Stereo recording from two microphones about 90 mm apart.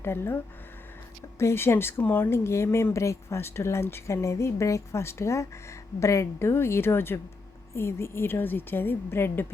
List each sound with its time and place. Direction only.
0.0 s a woman's voice: 25° left (ahead or behind)
1.4 s a woman's voice: 30° left (ahead or behind)